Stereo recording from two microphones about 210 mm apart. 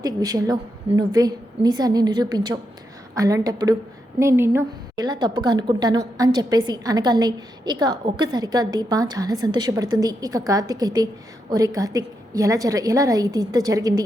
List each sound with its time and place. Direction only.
0.0 s a woman's voice: 15° right (ahead or behind)